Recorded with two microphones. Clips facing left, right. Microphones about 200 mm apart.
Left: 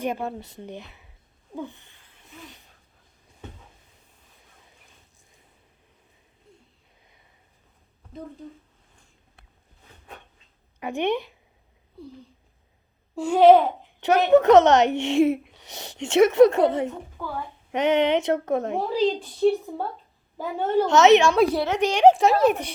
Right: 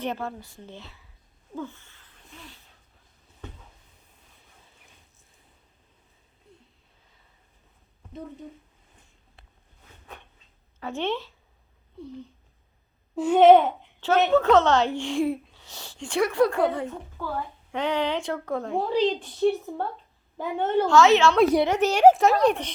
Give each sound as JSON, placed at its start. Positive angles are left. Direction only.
{"t": 0.0, "sound": "a woman's voice", "side_deg": 15}
{"t": 1.5, "sound": "a sound", "side_deg": 15}
{"t": 10.8, "sound": "a woman's voice", "side_deg": 15}
{"t": 13.1, "sound": "a child's voice", "side_deg": -5}
{"t": 14.3, "sound": "speech", "side_deg": 20}
{"t": 18.9, "sound": "a child's voice", "side_deg": 0}
{"t": 20.8, "sound": "speech", "side_deg": 20}
{"t": 21.5, "sound": "a child's voice", "side_deg": -10}